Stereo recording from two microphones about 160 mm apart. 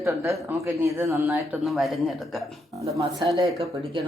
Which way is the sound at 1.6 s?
Centre (ahead or behind).